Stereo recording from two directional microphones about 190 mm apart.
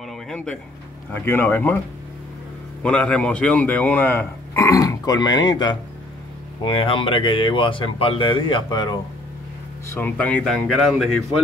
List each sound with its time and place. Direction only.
1.1 s speech: 10° left (ahead or behind)
2.8 s speech: 5° left (ahead or behind); by 8.9 s 20° left (ahead or behind)
9.8 s speech: 10° left (ahead or behind)